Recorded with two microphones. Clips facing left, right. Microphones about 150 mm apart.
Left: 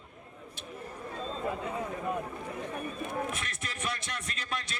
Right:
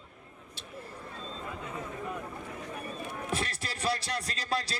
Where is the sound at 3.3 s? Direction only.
35° right (ahead or behind).